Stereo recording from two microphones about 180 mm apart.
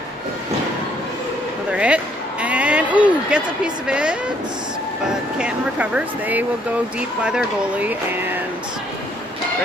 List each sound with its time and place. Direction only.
1.7 s speech: 5° right (ahead or behind)
2.4 s a sound: 10° right (ahead or behind)
5.4 s speech: 5° right (ahead or behind)